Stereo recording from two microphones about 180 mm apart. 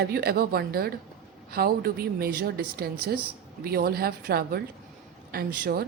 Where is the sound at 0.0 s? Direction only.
60° right (ahead or behind).